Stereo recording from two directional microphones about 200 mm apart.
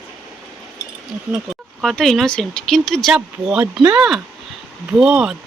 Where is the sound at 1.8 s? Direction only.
Centre (ahead or behind).